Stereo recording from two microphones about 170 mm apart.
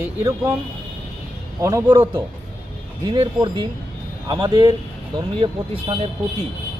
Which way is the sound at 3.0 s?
30° right (ahead or behind).